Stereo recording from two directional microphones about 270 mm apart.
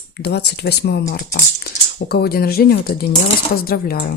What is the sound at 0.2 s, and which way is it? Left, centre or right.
Speech, left.